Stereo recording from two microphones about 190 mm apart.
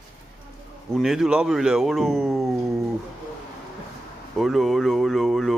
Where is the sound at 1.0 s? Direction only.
Centre (ahead or behind).